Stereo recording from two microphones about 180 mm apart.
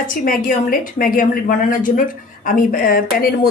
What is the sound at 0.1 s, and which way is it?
A woman's voice, 50° left (ahead or behind).